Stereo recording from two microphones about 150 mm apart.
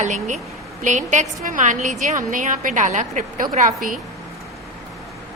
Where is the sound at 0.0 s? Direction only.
55° right (ahead or behind).